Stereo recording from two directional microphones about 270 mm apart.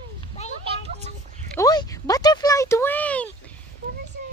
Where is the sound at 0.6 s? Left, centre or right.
Right.